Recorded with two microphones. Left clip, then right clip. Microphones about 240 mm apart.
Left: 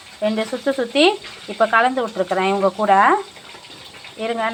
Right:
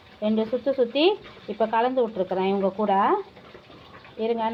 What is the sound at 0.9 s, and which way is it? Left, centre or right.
Speech, centre.